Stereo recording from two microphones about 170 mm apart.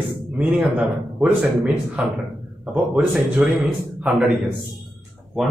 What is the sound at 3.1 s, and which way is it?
A man's voice, 5° right (ahead or behind).